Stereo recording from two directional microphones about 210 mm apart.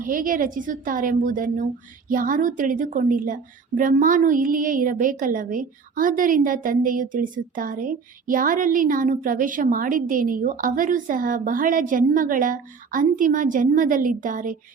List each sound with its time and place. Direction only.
0.0 s a woman's voice: 40° right (ahead or behind)